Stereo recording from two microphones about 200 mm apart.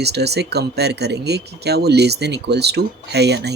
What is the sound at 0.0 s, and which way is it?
Speech, 55° right (ahead or behind).